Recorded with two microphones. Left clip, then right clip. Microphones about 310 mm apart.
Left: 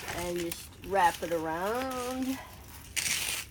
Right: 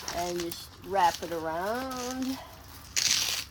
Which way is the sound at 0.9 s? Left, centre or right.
Right.